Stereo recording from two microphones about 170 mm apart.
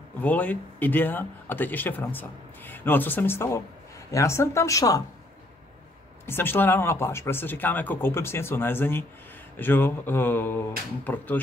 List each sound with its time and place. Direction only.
0.2 s speech: 10° left (ahead or behind)
6.2 s speech: 15° left (ahead or behind)